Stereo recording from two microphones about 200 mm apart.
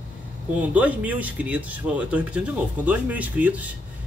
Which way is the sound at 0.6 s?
5° right (ahead or behind).